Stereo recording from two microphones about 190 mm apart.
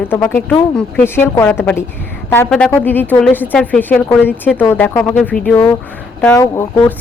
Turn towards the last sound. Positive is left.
turn(degrees=15)  # may be behind; listen again after turning